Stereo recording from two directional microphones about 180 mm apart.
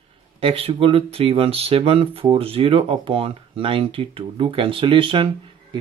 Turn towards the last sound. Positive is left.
turn(degrees=-30)  # may be behind; listen again after turning